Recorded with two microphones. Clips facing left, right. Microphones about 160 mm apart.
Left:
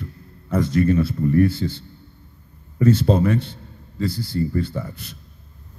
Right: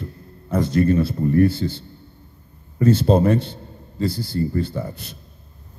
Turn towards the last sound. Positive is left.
turn(degrees=-35)  # may be behind; listen again after turning